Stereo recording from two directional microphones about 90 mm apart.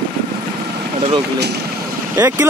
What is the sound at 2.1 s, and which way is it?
Speech, 20° right (ahead or behind).